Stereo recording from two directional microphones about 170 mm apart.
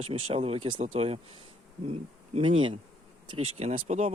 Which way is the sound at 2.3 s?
30° right (ahead or behind).